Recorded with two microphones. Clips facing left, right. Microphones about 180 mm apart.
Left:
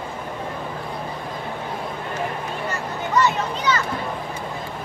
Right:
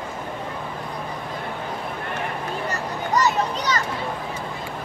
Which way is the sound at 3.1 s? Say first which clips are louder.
Even; 40° right (ahead or behind).